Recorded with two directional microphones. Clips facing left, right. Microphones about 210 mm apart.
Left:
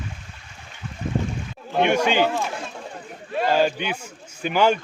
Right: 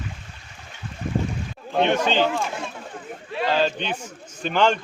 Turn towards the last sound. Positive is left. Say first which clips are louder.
# left 1 dB
turn(degrees=10)  # may be behind; listen again after turning